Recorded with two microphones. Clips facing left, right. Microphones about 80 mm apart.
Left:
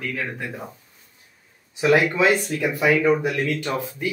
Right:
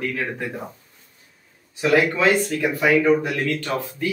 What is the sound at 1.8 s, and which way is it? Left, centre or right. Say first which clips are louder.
Speech: even; left.